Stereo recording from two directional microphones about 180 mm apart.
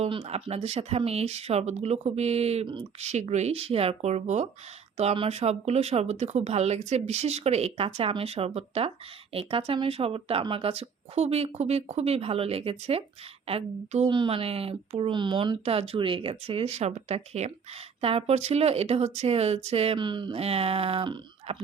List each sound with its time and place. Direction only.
0.0 s speech: 30° right (ahead or behind)